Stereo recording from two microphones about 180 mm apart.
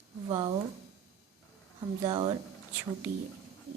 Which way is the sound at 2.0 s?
25° right (ahead or behind).